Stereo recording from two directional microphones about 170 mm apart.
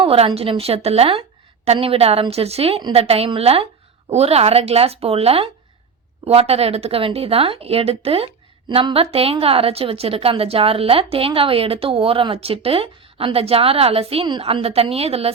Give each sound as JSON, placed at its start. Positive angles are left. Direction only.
{"t": 0.0, "sound": "a woman's voice", "side_deg": -35}